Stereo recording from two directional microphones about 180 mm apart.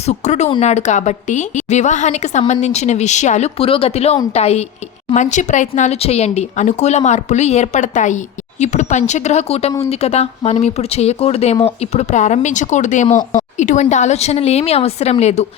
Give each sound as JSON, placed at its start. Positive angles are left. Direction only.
{"t": 0.0, "sound": "speech", "side_deg": 40}